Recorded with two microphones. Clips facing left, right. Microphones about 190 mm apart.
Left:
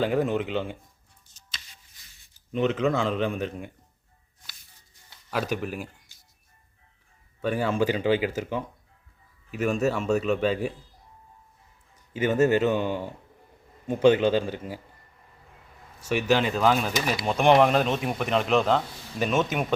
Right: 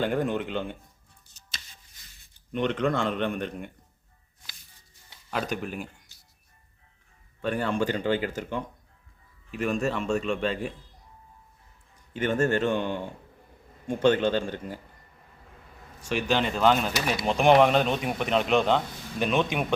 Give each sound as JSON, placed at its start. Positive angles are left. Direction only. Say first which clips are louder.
{"t": 0.0, "sound": "speech", "louder": "left 2 dB", "side_deg": 5}
{"t": 2.5, "sound": "speech", "louder": "left 2 dB", "side_deg": 5}
{"t": 5.3, "sound": "speech", "louder": "left 2 dB", "side_deg": 5}
{"t": 7.4, "sound": "speech", "louder": "left 2 dB", "side_deg": 5}
{"t": 12.1, "sound": "speech", "louder": "left 3 dB", "side_deg": 5}
{"t": 16.0, "sound": "speech", "louder": "left 3 dB", "side_deg": 5}